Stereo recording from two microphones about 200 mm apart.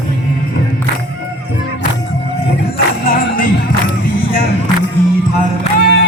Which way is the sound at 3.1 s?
45° left (ahead or behind).